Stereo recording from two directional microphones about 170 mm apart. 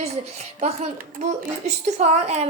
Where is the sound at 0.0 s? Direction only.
40° right (ahead or behind).